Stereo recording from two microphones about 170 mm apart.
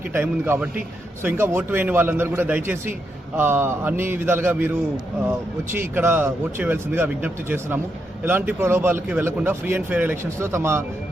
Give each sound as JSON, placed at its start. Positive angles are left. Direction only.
{"t": 0.1, "sound": "speech", "side_deg": -15}